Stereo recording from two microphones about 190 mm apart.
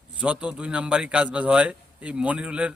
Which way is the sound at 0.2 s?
5° right (ahead or behind).